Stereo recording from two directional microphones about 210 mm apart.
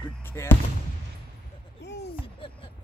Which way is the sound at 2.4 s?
25° left (ahead or behind).